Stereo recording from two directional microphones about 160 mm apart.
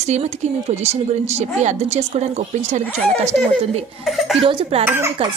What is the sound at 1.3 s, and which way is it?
Speech, 45° right (ahead or behind).